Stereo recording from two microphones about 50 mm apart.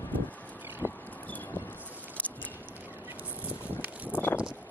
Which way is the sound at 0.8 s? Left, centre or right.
Right.